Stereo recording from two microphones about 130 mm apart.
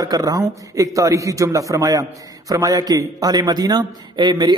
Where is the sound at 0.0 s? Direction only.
30° right (ahead or behind).